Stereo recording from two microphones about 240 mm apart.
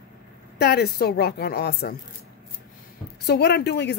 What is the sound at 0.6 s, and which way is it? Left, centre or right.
A woman's voice, left.